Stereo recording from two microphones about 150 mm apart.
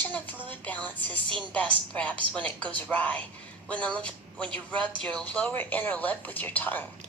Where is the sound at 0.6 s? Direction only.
10° left (ahead or behind).